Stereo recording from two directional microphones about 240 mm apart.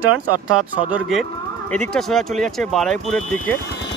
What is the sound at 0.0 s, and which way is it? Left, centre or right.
Speech, right.